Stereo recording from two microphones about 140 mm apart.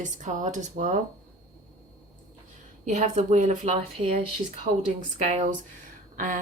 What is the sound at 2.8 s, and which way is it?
Speech, 60° right (ahead or behind).